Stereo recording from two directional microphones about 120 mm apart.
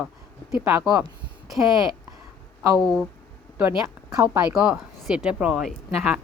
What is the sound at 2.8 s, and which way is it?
Speech, centre (ahead or behind).